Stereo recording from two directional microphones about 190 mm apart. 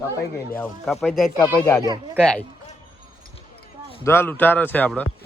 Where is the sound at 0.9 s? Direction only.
Centre (ahead or behind).